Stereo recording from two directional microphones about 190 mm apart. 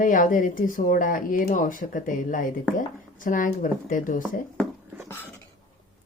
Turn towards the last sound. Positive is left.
turn(degrees=-10)  # may be behind; listen again after turning